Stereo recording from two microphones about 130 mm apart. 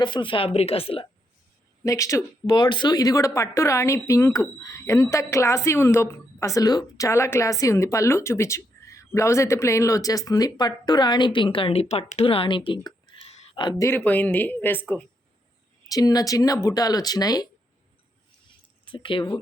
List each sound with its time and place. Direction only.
0.0 s speech: 40° left (ahead or behind)
1.8 s a woman's voice: 25° left (ahead or behind)
2.5 s a woman's voice: 35° left (ahead or behind)
13.5 s a sound: 35° left (ahead or behind)
13.7 s speech: 20° left (ahead or behind)
15.9 s a woman's voice: 30° left (ahead or behind)
18.9 s speech: 40° left (ahead or behind)